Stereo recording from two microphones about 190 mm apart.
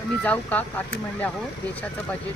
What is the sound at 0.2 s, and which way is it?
Speech, 5° left (ahead or behind).